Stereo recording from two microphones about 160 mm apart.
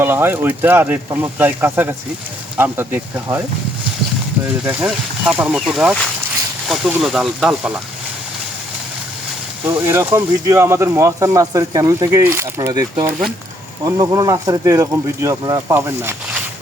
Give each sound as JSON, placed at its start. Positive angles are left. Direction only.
{"t": 0.0, "sound": "speech", "side_deg": -15}
{"t": 4.6, "sound": "speech", "side_deg": -5}
{"t": 7.0, "sound": "speech", "side_deg": 0}
{"t": 9.6, "sound": "speech", "side_deg": -15}